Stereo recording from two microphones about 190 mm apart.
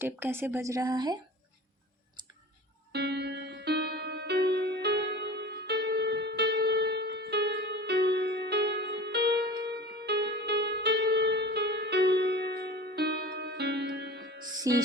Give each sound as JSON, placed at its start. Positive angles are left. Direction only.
{"t": 0.0, "sound": "speech", "side_deg": -10}
{"t": 2.9, "sound": "music", "side_deg": -60}